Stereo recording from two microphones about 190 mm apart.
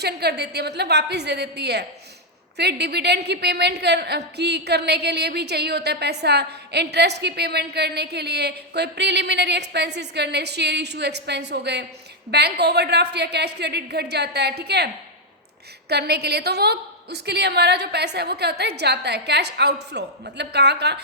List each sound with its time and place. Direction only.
0.0 s a woman's voice: 60° right (ahead or behind)
15.9 s a woman's voice: 60° right (ahead or behind)